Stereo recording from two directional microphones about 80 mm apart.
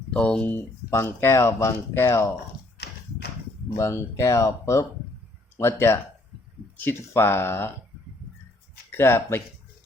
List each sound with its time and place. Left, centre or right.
0.1 s speech: centre
0.4 s speech: left
3.8 s speech: left
7.1 s speech: left
8.9 s speech: left